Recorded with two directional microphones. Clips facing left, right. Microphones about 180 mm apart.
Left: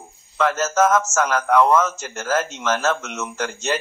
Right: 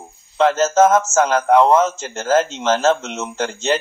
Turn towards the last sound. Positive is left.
turn(degrees=-25)  # may be behind; listen again after turning